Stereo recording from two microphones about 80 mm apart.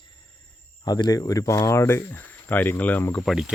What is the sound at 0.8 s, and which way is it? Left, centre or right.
Speech, left.